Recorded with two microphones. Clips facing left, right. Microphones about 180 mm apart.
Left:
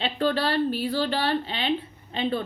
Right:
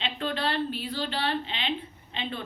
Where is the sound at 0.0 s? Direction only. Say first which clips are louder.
Left 6 dB; 40° left (ahead or behind).